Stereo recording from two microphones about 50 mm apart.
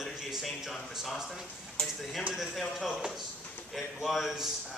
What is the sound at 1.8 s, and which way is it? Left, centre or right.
Speech, centre.